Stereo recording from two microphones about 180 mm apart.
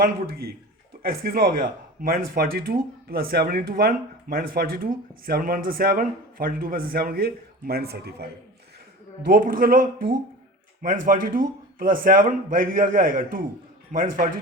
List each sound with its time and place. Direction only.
0.0 s speech: 60° right (ahead or behind)
9.2 s a man's voice: 50° right (ahead or behind)